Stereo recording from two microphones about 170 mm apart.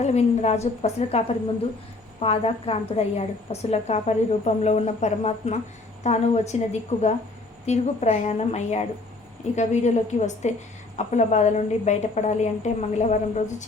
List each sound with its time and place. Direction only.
0.0 s a woman's voice: 40° left (ahead or behind)